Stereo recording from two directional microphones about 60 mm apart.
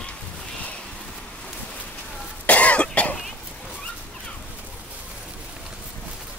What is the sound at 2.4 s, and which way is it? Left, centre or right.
Cough, left.